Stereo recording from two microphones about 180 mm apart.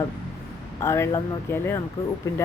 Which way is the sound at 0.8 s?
15° left (ahead or behind).